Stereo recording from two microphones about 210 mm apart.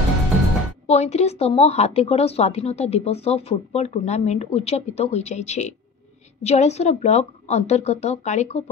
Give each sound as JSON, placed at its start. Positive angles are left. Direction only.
{"t": 0.8, "sound": "a woman's voice", "side_deg": 30}